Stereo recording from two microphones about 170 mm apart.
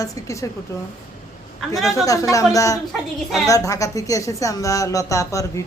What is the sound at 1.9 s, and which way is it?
Speech, 20° left (ahead or behind).